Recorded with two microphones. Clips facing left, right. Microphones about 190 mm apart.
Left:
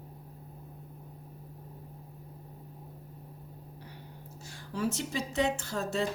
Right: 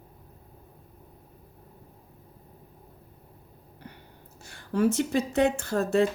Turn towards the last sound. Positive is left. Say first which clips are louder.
# right 8 dB
turn(degrees=-55)  # may be behind; listen again after turning